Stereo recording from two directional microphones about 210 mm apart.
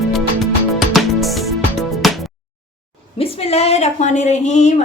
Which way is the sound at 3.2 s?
30° left (ahead or behind).